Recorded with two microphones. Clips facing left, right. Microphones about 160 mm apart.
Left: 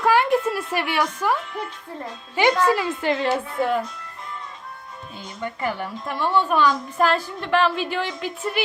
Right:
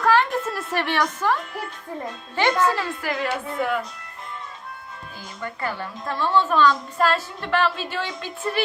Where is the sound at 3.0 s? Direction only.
25° left (ahead or behind).